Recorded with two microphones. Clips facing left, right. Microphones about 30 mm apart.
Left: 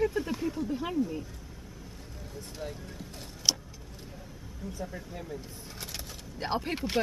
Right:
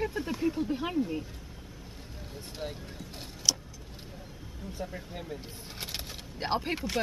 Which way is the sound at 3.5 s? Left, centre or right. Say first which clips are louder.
Even; centre.